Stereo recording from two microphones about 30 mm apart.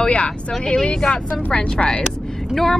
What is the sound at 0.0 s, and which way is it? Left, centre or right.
Speech, left.